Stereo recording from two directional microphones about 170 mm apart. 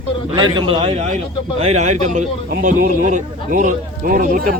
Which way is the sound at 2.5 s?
55° right (ahead or behind).